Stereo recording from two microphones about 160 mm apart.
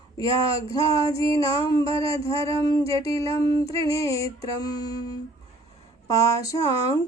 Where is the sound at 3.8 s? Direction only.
20° left (ahead or behind).